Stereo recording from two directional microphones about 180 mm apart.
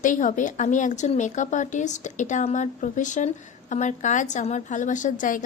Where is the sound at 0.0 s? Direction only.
45° left (ahead or behind).